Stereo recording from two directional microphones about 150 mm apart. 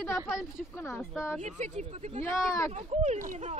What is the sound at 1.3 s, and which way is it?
Speech, 50° right (ahead or behind).